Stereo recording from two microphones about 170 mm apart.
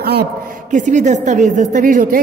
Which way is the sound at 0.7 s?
45° right (ahead or behind).